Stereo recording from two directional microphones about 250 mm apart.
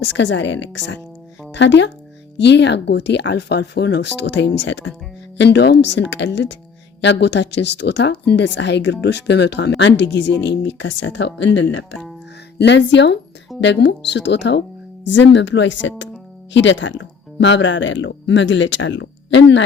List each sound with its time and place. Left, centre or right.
0.0 s speech: left